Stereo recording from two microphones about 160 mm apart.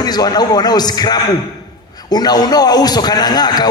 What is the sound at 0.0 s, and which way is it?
A man's voice, 25° left (ahead or behind).